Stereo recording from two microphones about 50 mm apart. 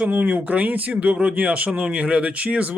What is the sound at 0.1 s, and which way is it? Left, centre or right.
Speech, right.